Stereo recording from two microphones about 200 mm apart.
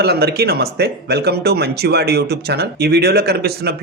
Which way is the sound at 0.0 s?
55° right (ahead or behind).